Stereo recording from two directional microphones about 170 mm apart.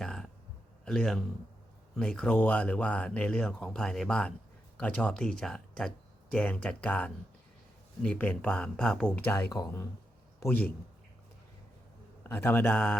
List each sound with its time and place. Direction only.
0.0 s a sound: 5° left (ahead or behind)
0.9 s speech: 5° left (ahead or behind); by 9.8 s 20° left (ahead or behind)
10.4 s speech: 10° left (ahead or behind)
12.2 s speech: 10° left (ahead or behind)